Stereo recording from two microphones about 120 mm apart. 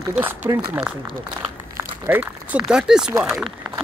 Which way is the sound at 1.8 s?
15° right (ahead or behind).